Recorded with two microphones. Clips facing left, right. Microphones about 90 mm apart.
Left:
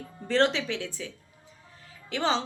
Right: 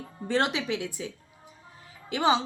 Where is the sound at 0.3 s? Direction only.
15° right (ahead or behind).